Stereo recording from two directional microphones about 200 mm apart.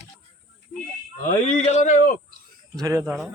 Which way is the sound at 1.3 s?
35° left (ahead or behind).